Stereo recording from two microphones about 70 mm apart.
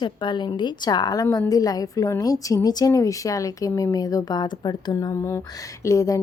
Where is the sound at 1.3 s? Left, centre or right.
Left.